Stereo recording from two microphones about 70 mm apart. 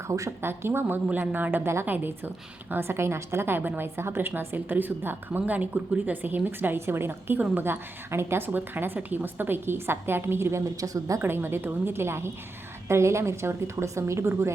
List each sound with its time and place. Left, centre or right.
0.1 s a woman's voice: right
0.4 s a woman's voice: right
1.0 s a woman's voice: right
10.8 s speech: right
11.2 s a woman's voice: right